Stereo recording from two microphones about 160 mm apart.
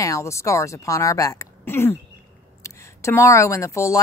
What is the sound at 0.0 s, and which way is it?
Speech, 20° left (ahead or behind).